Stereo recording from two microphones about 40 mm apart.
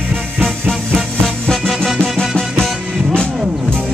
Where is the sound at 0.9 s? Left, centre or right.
Centre.